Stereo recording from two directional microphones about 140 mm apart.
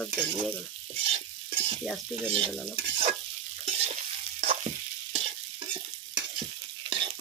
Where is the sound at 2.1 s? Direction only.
40° right (ahead or behind).